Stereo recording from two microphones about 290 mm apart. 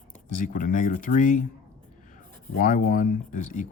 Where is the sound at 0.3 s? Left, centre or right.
Left.